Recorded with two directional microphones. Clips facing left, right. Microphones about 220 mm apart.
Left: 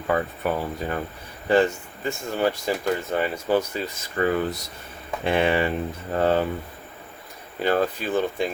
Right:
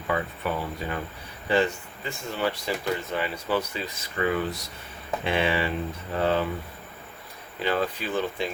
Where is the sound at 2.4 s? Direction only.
45° left (ahead or behind).